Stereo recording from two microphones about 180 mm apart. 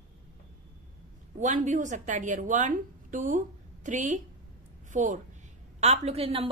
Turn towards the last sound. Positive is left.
turn(degrees=-30)  # may be behind; listen again after turning